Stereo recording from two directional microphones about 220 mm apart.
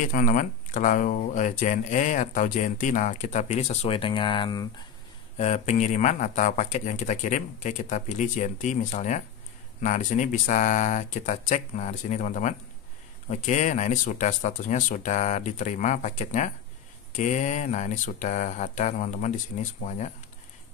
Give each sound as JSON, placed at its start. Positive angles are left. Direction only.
{"t": 0.1, "sound": "speech", "side_deg": 40}
{"t": 5.4, "sound": "speech", "side_deg": 30}